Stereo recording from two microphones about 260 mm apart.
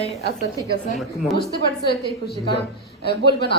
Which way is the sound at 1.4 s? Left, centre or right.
Left.